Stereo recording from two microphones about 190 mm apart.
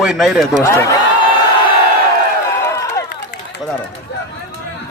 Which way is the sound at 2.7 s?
15° left (ahead or behind).